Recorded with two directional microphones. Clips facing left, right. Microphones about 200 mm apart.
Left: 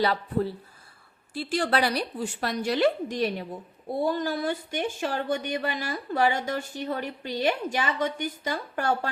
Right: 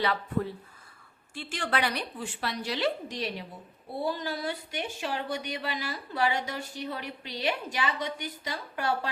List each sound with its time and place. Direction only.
0.0 s a woman's voice: 35° left (ahead or behind)